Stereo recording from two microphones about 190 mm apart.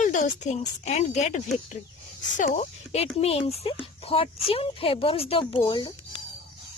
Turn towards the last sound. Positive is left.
turn(degrees=25)  # may be behind; listen again after turning